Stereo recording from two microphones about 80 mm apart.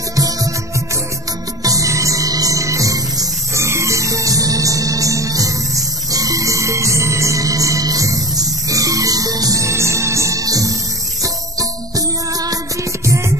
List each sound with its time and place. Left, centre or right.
0.1 s music: right
1.6 s music: right
13.0 s music: right